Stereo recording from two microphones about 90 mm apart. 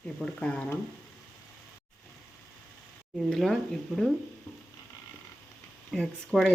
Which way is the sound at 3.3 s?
5° left (ahead or behind).